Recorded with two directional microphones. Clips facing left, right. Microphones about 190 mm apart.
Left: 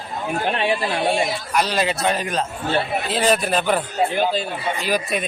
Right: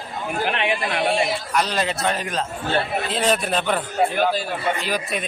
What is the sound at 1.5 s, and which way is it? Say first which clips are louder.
A man's voice: left 3 dB; 5° left (ahead or behind).